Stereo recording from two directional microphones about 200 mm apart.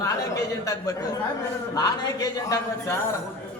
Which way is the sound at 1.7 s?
20° left (ahead or behind).